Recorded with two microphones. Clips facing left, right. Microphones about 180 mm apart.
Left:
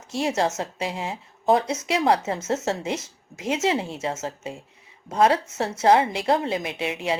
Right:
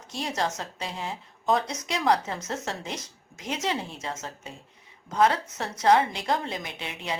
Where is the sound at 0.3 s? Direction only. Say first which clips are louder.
Left 5 dB; 25° left (ahead or behind).